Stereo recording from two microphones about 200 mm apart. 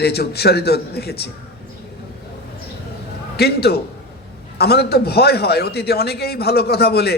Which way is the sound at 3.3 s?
55° left (ahead or behind).